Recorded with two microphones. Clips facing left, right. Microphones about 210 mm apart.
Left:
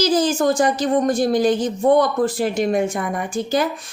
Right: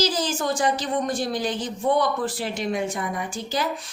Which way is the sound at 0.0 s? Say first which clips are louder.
Left 7 dB; 50° left (ahead or behind).